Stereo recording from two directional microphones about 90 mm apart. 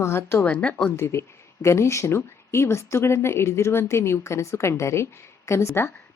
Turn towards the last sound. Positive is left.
turn(degrees=30)  # may be behind; listen again after turning